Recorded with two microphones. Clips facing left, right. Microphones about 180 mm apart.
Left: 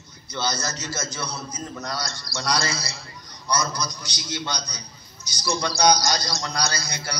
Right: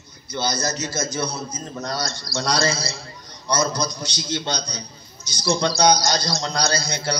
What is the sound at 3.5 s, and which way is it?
A man's voice, 25° right (ahead or behind).